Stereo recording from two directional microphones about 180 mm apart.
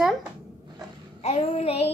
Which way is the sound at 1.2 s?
35° left (ahead or behind).